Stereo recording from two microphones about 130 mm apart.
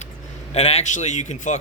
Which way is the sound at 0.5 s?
55° left (ahead or behind).